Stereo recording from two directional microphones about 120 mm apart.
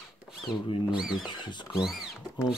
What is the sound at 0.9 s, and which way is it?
Speech, 5° right (ahead or behind).